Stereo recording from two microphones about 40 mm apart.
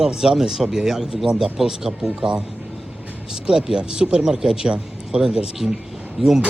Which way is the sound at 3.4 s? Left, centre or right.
Centre.